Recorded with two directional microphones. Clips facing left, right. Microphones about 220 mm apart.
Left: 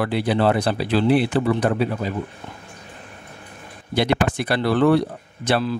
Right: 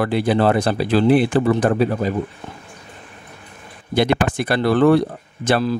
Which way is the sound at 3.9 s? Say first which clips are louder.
Right 2 dB; 50° right (ahead or behind).